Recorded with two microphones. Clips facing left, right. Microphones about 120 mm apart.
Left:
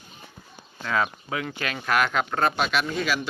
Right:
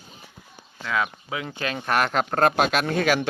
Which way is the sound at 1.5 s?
30° right (ahead or behind).